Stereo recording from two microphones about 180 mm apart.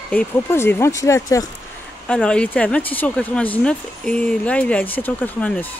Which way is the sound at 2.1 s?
5° left (ahead or behind).